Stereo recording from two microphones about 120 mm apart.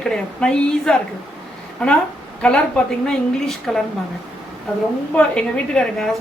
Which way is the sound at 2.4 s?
10° left (ahead or behind).